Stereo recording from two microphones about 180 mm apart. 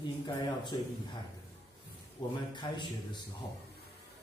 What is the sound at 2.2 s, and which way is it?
Speech, 25° left (ahead or behind).